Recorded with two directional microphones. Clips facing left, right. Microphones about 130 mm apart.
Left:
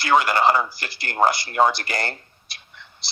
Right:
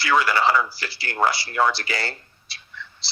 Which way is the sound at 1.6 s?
20° left (ahead or behind).